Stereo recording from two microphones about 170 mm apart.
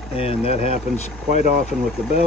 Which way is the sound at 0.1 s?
35° left (ahead or behind).